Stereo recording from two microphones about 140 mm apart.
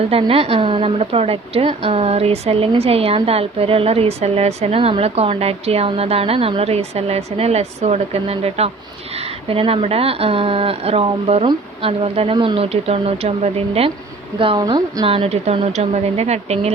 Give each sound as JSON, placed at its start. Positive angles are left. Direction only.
{"t": 0.0, "sound": "a woman's voice", "side_deg": -45}
{"t": 15.1, "sound": "a woman's voice", "side_deg": -45}